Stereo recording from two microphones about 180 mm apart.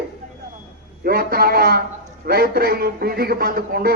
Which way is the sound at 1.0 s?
55° right (ahead or behind).